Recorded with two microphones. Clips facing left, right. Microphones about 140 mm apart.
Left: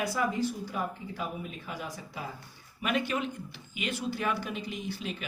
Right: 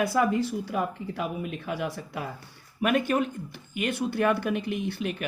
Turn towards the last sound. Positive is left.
turn(degrees=-60)  # may be behind; listen again after turning